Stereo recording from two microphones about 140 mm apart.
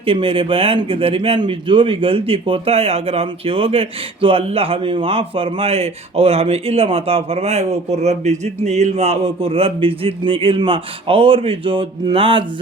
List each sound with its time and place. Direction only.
0.0 s speech: 40° right (ahead or behind)